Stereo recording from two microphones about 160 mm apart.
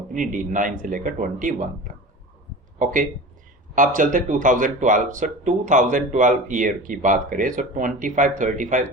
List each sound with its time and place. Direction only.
0.1 s speech: 55° right (ahead or behind)